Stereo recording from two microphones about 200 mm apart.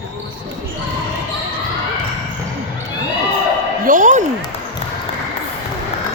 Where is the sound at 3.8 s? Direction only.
40° right (ahead or behind).